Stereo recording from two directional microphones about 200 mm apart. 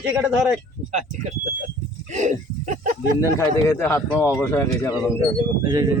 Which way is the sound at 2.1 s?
35° right (ahead or behind).